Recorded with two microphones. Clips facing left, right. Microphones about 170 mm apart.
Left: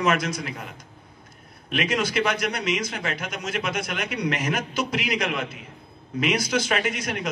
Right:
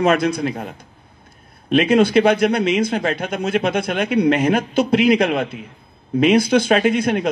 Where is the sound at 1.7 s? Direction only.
55° right (ahead or behind).